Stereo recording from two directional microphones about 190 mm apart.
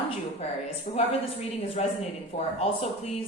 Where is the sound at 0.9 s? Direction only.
40° left (ahead or behind).